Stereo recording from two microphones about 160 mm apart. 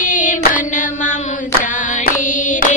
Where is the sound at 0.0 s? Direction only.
55° left (ahead or behind).